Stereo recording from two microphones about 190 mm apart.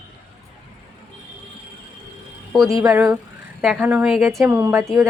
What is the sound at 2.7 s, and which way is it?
Speech, 20° right (ahead or behind).